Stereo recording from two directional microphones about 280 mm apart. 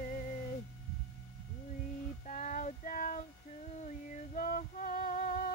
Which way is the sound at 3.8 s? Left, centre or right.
Left.